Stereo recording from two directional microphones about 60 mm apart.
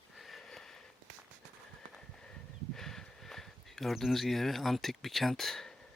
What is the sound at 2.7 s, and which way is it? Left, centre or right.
Speech, centre.